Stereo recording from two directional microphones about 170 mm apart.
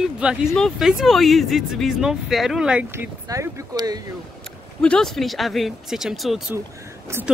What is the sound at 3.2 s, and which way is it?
Speech, 20° right (ahead or behind).